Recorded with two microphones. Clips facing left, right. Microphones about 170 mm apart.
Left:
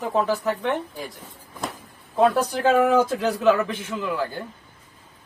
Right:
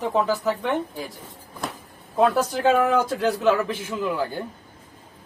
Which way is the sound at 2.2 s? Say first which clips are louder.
Left 1 dB; centre (ahead or behind).